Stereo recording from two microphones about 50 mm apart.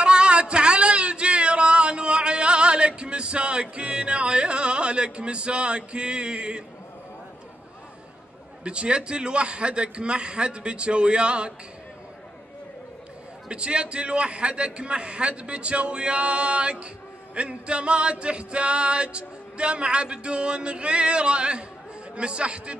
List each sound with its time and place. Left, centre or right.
0.0 s a sound: centre
3.7 s music: right
8.6 s music: right
13.5 s music: right